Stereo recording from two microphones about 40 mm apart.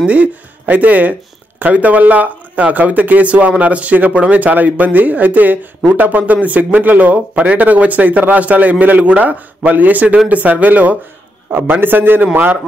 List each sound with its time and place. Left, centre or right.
0.0 s a man's voice: right
11.5 s a man's voice: right